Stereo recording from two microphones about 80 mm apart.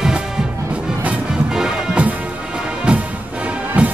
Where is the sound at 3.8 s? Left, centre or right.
Centre.